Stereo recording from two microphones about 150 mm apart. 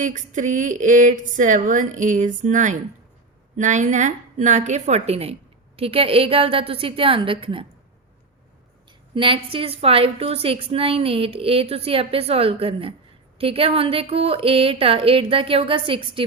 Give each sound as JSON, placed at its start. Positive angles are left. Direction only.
{"t": 0.0, "sound": "a woman's voice", "side_deg": -55}
{"t": 9.1, "sound": "a woman's voice", "side_deg": -35}